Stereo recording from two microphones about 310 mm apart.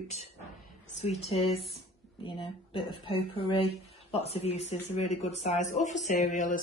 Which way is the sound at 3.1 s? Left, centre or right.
Centre.